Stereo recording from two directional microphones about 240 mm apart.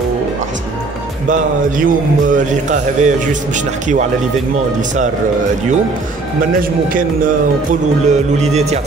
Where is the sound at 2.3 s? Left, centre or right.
Right.